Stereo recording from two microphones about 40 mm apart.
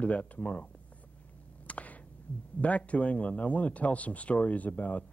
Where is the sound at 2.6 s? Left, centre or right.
Left.